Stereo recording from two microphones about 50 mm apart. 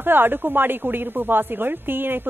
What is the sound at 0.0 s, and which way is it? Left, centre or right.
A woman's voice, right.